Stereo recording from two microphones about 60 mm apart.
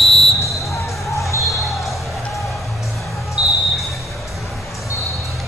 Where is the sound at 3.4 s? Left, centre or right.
Right.